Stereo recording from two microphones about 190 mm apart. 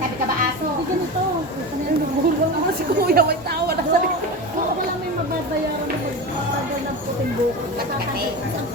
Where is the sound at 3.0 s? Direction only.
55° right (ahead or behind).